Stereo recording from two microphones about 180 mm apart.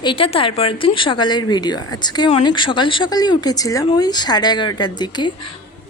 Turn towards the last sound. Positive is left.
turn(degrees=25)  # may be behind; listen again after turning